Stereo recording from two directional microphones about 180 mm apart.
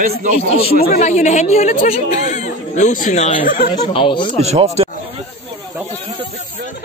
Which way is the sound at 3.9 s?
30° left (ahead or behind).